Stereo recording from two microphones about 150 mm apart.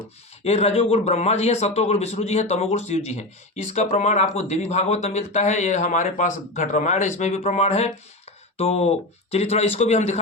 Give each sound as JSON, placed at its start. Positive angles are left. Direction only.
{"t": 0.4, "sound": "a man's voice", "side_deg": 45}